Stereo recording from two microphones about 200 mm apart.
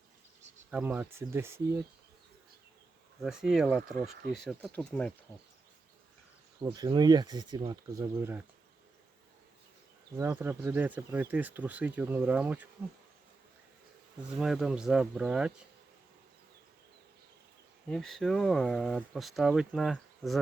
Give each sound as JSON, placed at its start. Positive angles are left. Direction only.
{"t": 0.7, "sound": "speech", "side_deg": -10}
{"t": 3.2, "sound": "speech", "side_deg": -5}
{"t": 6.6, "sound": "speech", "side_deg": -20}
{"t": 10.2, "sound": "speech", "side_deg": -10}
{"t": 14.3, "sound": "speech", "side_deg": 0}
{"t": 17.8, "sound": "speech", "side_deg": 0}